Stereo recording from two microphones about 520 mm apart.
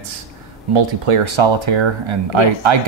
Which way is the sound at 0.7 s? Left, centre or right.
Right.